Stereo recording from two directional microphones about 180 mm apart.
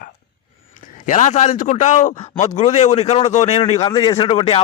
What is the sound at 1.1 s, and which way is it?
A man's voice, 40° left (ahead or behind).